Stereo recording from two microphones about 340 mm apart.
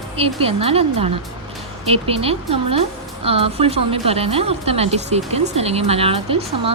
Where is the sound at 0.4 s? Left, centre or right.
Centre.